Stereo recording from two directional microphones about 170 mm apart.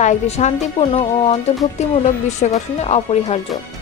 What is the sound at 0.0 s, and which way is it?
Speech, 45° left (ahead or behind).